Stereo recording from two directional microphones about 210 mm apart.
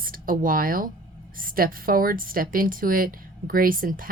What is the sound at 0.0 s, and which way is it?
A woman's voice, 40° right (ahead or behind).